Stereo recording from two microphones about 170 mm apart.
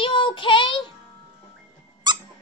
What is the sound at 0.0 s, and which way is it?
Child singing, 30° left (ahead or behind).